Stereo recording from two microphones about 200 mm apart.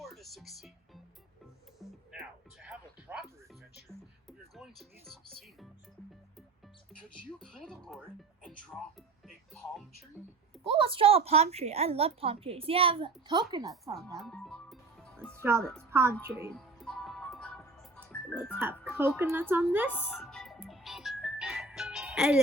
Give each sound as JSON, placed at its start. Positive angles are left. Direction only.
{"t": 0.0, "sound": "speech", "side_deg": 0}
{"t": 1.8, "sound": "music", "side_deg": 0}
{"t": 4.3, "sound": "music", "side_deg": 0}
{"t": 7.1, "sound": "speech", "side_deg": 5}
{"t": 10.7, "sound": "a woman's voice", "side_deg": -30}
{"t": 14.2, "sound": "music", "side_deg": 0}
{"t": 15.4, "sound": "a woman's voice", "side_deg": -10}
{"t": 16.6, "sound": "music", "side_deg": 0}
{"t": 18.9, "sound": "a woman's voice", "side_deg": -10}
{"t": 19.9, "sound": "speech", "side_deg": 10}
{"t": 20.1, "sound": "music", "side_deg": 0}